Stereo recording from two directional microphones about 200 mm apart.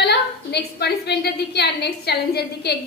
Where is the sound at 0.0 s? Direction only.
55° left (ahead or behind).